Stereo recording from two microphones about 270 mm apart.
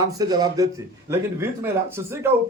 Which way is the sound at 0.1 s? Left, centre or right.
Centre.